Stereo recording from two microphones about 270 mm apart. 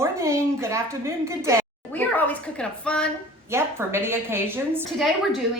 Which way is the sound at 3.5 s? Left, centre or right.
Centre.